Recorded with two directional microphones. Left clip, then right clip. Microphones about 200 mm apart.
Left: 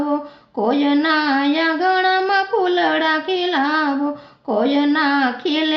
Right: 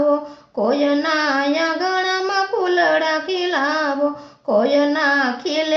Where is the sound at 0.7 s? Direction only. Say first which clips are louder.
Left 1 dB; 30° left (ahead or behind).